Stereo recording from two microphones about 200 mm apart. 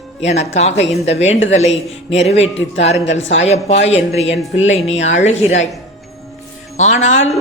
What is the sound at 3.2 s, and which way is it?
Speech, 65° left (ahead or behind).